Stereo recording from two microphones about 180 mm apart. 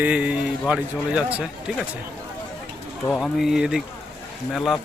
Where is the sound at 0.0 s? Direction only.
5° right (ahead or behind).